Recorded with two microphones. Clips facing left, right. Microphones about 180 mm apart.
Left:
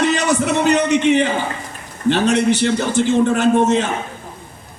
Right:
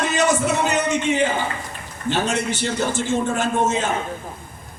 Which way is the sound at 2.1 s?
65° left (ahead or behind).